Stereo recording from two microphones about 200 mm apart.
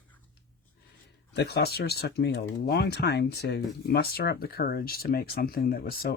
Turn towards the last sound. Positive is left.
turn(degrees=50)  # may be behind; listen again after turning